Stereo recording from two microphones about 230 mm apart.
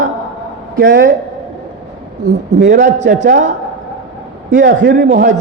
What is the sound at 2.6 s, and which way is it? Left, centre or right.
Speech, right.